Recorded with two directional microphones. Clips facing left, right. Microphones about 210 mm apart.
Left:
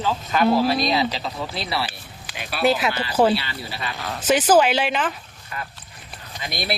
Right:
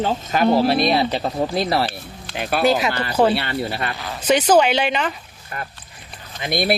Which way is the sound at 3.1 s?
5° left (ahead or behind).